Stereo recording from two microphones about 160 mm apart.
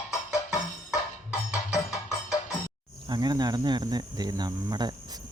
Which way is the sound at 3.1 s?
25° right (ahead or behind).